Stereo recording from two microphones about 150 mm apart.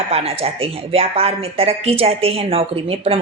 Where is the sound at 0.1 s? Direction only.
40° right (ahead or behind).